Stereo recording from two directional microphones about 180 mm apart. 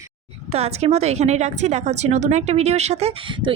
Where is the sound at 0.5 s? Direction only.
35° right (ahead or behind).